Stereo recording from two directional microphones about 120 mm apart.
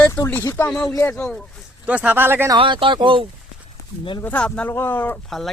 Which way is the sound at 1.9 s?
15° right (ahead or behind).